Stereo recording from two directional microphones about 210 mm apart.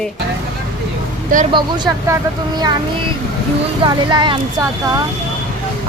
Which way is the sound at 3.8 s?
20° right (ahead or behind).